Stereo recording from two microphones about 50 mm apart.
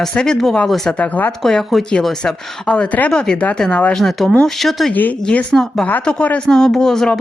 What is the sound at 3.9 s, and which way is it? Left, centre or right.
Speech, centre.